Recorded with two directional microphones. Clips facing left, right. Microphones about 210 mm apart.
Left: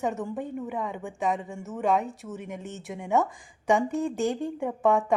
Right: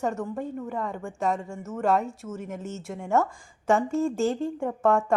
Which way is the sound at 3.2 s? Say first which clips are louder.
Even; 15° left (ahead or behind).